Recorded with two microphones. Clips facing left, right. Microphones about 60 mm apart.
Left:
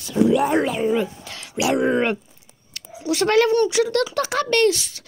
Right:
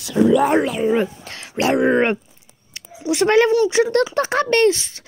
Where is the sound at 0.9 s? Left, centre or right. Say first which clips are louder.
Right 3 dB; right.